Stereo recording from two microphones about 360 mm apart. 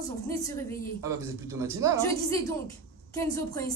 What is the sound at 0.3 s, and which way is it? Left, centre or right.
Speech, centre.